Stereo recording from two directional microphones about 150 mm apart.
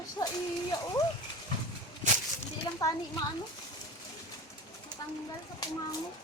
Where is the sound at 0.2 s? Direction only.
25° left (ahead or behind).